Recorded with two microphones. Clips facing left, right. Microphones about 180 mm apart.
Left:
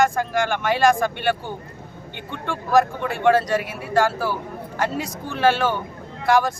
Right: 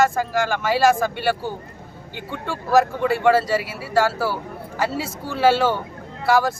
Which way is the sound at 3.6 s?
55° left (ahead or behind).